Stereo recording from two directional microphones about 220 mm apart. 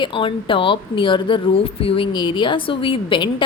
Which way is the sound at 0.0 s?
20° left (ahead or behind).